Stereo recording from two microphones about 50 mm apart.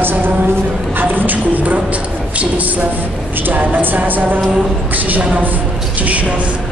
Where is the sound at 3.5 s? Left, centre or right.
Right.